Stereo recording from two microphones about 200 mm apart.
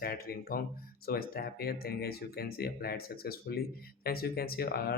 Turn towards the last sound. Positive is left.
turn(degrees=50)  # may be behind; listen again after turning